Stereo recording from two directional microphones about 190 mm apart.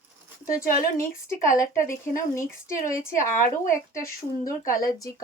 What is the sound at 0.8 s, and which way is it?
Speech, 15° left (ahead or behind).